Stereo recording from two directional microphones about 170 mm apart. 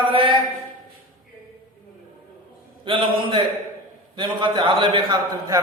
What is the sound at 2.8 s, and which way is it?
A man's voice, 30° right (ahead or behind).